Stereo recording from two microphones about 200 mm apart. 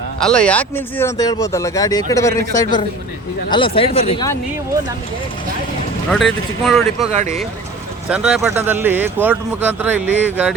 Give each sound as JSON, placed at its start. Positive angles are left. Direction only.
{"t": 0.2, "sound": "speech", "side_deg": 5}
{"t": 3.5, "sound": "speech", "side_deg": 25}
{"t": 6.1, "sound": "speech", "side_deg": 0}
{"t": 7.1, "sound": "speech", "side_deg": -35}
{"t": 8.1, "sound": "speech", "side_deg": -5}